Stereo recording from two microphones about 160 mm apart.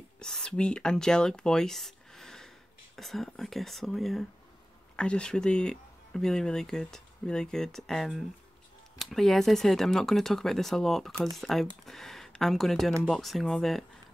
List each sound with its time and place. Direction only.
0.2 s speech: 5° left (ahead or behind)